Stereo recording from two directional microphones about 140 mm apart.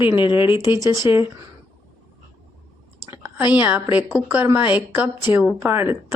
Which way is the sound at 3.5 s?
15° right (ahead or behind).